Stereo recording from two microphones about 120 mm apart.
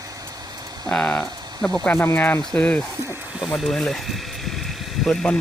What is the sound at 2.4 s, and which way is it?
Speech, 5° left (ahead or behind).